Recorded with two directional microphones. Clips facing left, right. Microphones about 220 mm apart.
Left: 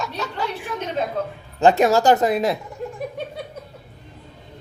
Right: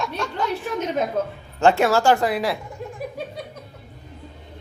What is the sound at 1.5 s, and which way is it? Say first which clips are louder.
Speech: left 2 dB; 20° left (ahead or behind).